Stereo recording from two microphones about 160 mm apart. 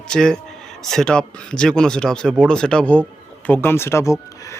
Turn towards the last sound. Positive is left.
turn(degrees=15)  # may be behind; listen again after turning